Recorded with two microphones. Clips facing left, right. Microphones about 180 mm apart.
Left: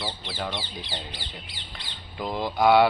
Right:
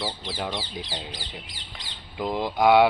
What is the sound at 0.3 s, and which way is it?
Speech, 10° right (ahead or behind).